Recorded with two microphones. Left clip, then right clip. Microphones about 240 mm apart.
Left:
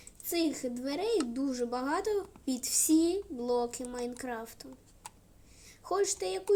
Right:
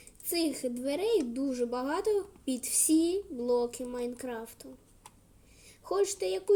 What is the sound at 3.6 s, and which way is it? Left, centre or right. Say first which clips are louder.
Speech: right 2 dB; centre.